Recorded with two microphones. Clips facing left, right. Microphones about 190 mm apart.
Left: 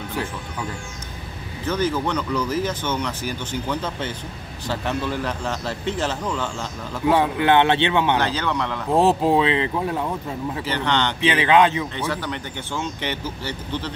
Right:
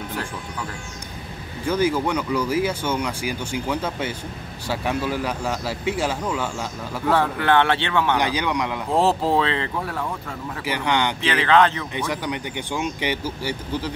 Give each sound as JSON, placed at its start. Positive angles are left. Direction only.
{"t": 1.7, "sound": "speech", "side_deg": -10}
{"t": 7.1, "sound": "a man's voice", "side_deg": 15}
{"t": 8.2, "sound": "speech", "side_deg": -15}
{"t": 8.9, "sound": "speech", "side_deg": 15}
{"t": 10.6, "sound": "speech", "side_deg": -10}
{"t": 11.1, "sound": "speech", "side_deg": 15}
{"t": 11.9, "sound": "speech", "side_deg": -15}